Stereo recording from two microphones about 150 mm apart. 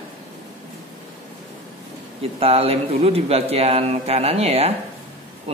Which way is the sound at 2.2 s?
40° right (ahead or behind).